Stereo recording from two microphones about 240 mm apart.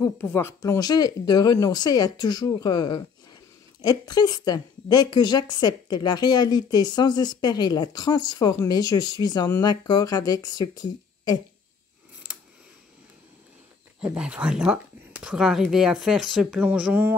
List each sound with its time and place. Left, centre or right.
0.0 s a woman's voice: centre
14.0 s speech: centre